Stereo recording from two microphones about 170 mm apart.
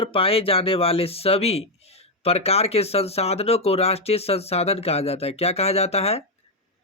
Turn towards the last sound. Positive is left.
turn(degrees=40)  # may be behind; listen again after turning